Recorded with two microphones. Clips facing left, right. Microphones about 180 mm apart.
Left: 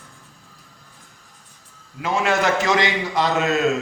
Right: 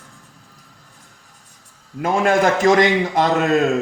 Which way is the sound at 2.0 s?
50° right (ahead or behind).